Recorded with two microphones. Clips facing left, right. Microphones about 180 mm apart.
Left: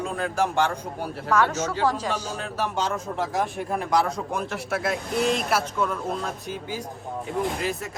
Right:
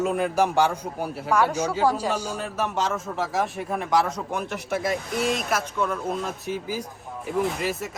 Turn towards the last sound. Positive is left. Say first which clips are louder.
# right 1 dB
turn(degrees=0)  # may be behind; listen again after turning